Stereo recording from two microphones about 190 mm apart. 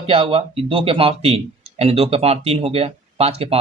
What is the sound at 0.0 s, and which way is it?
Speech, 30° right (ahead or behind).